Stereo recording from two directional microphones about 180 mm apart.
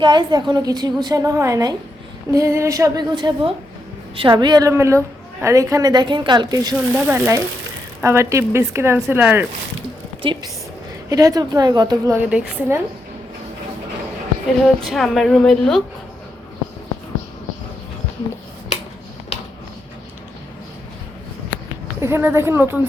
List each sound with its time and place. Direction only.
0.0 s a woman's voice: 25° right (ahead or behind)
10.2 s a woman's voice: 30° right (ahead or behind)
11.1 s a woman's voice: 20° right (ahead or behind)
14.8 s a woman's voice: centre (ahead or behind)
19.3 s a sound: 35° left (ahead or behind)
22.0 s speech: 15° right (ahead or behind)